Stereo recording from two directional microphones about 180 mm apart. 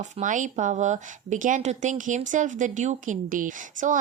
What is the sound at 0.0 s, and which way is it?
A woman's voice, 45° right (ahead or behind).